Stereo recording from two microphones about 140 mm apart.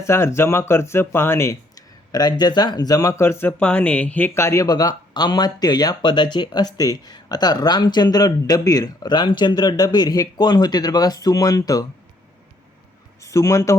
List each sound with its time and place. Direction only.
0.0 s speech: 20° left (ahead or behind)
13.2 s speech: 20° left (ahead or behind)